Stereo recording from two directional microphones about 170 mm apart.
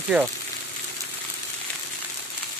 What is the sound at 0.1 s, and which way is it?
Speech, 5° right (ahead or behind).